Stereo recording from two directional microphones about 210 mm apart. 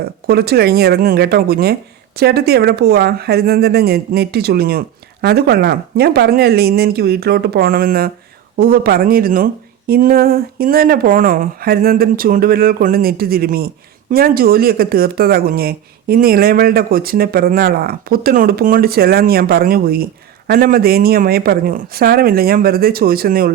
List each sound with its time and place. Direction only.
0.3 s speech: 50° right (ahead or behind)